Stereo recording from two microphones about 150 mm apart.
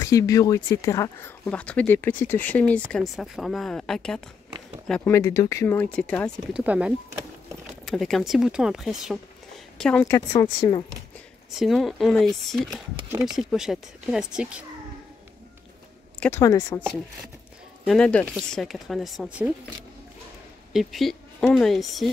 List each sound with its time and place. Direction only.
0.0 s speech: 20° left (ahead or behind)
1.4 s speech: 10° left (ahead or behind)
5.1 s speech: 20° left (ahead or behind)
6.5 s speech: 10° right (ahead or behind); by 10.2 s 10° left (ahead or behind)
10.3 s speech: 25° left (ahead or behind)
11.5 s speech: centre (ahead or behind)
16.2 s speech: 15° left (ahead or behind)
17.8 s speech: 5° left (ahead or behind)
20.7 s speech: centre (ahead or behind)